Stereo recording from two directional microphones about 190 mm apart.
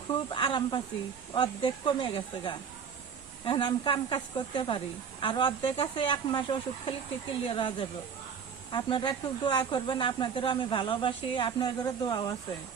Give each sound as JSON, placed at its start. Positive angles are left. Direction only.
{"t": 0.1, "sound": "speech", "side_deg": 25}